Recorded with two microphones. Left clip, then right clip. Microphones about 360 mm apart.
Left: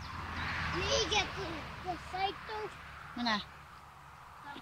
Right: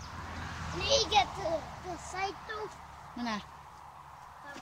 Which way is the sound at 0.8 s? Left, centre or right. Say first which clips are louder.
Right 6 dB; right.